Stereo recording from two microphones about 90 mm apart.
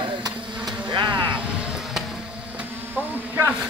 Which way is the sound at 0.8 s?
55° right (ahead or behind).